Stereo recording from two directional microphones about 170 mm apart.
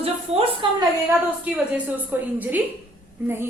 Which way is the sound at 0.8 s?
15° right (ahead or behind).